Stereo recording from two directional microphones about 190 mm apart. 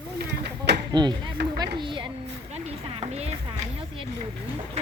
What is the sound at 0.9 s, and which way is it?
Speech, 20° right (ahead or behind).